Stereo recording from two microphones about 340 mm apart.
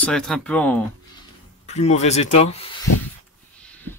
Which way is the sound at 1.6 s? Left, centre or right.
Centre.